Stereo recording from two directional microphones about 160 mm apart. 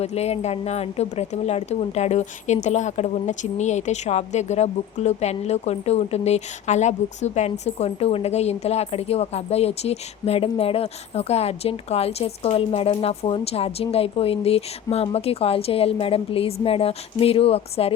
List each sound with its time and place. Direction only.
0.0 s speech: 40° left (ahead or behind)